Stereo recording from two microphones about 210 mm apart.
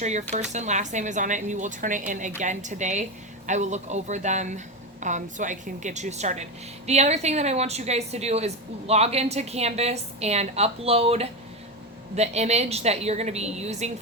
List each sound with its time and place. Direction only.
0.0 s speech: 35° right (ahead or behind)